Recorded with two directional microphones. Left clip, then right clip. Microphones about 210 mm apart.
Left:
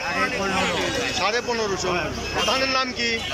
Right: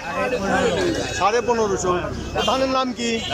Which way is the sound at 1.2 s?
10° right (ahead or behind).